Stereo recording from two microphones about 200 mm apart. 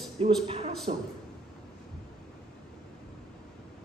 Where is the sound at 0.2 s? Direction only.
30° right (ahead or behind).